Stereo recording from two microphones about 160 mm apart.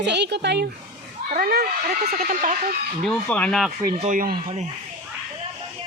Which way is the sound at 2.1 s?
55° right (ahead or behind).